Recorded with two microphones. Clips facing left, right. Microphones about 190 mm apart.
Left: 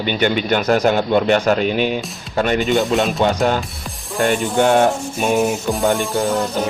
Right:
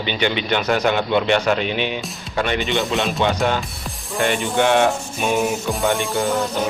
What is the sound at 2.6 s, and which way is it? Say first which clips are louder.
Music: left 4 dB; centre (ahead or behind).